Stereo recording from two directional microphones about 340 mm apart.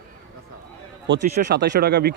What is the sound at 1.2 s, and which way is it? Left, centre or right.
Speech, right.